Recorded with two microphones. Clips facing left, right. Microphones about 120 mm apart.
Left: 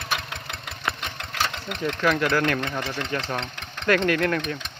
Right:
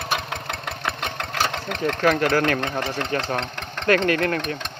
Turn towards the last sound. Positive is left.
turn(degrees=-60)  # may be behind; listen again after turning